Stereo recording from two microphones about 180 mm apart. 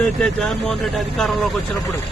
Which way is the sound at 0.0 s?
5° left (ahead or behind).